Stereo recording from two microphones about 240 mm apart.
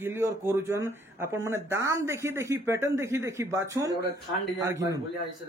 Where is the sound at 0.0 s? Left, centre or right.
Centre.